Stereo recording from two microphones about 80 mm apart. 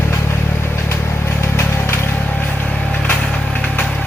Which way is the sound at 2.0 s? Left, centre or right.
Left.